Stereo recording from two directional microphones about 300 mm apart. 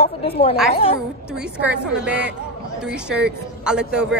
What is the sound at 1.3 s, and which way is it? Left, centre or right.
A woman's voice, centre.